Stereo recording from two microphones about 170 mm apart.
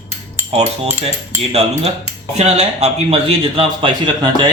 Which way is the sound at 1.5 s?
40° right (ahead or behind).